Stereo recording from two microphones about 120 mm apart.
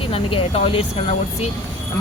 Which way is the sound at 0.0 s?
50° left (ahead or behind).